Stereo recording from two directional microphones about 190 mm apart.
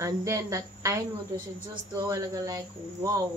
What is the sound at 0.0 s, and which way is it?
A woman's voice, 15° right (ahead or behind).